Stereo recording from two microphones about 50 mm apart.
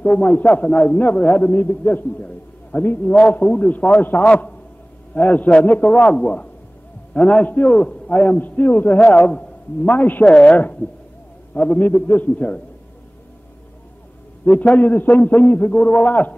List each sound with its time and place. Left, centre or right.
0.0 s a man's voice: left
4.2 s a woman's voice: left
9.8 s a man's voice: left
10.2 s a woman's voice: left
10.8 s speech: left
11.5 s a man's voice: left
14.4 s a man's voice: left